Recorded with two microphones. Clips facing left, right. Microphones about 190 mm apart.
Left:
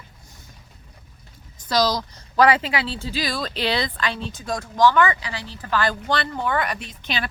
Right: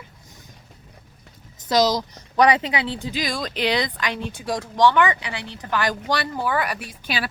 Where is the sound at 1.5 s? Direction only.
20° right (ahead or behind).